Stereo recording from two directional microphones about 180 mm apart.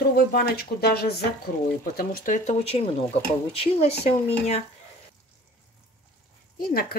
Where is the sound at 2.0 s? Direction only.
50° left (ahead or behind); by 4.1 s 35° left (ahead or behind).